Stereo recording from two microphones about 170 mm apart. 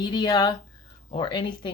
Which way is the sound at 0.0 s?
25° left (ahead or behind).